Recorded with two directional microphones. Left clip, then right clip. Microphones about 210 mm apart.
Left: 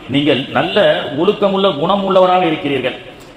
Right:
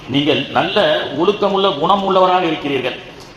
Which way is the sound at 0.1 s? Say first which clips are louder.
Left 1 dB; 30° left (ahead or behind).